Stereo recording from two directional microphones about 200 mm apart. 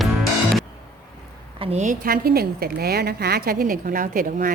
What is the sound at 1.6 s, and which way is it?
A woman's voice, 35° right (ahead or behind).